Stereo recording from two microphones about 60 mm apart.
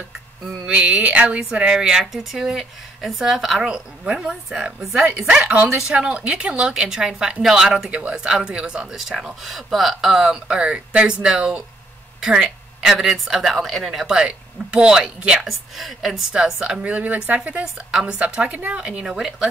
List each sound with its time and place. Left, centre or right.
0.7 s a woman's voice: centre
9.2 s a woman's voice: centre
13.8 s a woman's voice: centre
15.4 s a woman's voice: centre
19.0 s a woman's voice: centre